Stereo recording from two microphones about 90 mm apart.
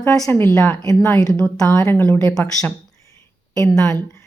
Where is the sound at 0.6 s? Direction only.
30° left (ahead or behind).